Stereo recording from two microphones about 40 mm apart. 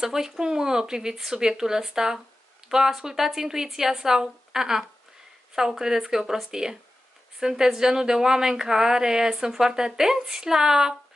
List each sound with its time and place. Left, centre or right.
0.0 s speech: centre